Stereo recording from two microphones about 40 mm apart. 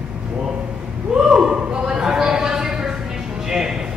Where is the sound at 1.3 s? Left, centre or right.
Right.